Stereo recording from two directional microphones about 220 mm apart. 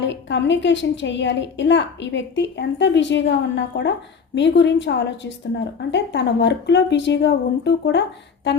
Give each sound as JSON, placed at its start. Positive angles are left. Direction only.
{"t": 0.0, "sound": "a woman's voice", "side_deg": 55}